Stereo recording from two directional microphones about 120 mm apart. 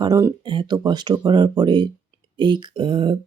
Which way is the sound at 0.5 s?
35° right (ahead or behind).